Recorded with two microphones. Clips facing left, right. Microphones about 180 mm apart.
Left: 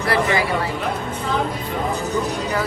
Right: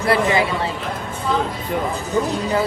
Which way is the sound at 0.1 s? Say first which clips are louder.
Right 2 dB; 25° right (ahead or behind).